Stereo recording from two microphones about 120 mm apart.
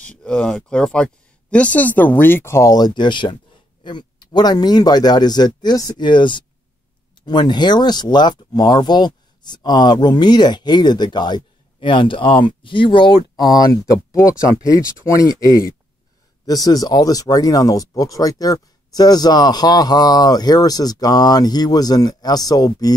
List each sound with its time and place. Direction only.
0.0 s speech: 10° left (ahead or behind); by 22.9 s 30° left (ahead or behind)